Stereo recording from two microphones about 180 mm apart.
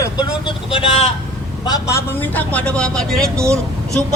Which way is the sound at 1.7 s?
20° left (ahead or behind).